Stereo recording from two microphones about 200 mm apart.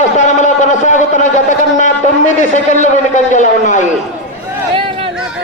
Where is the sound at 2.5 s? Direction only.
35° left (ahead or behind).